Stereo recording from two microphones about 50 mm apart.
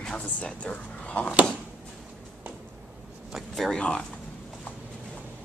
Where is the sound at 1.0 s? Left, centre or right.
Left.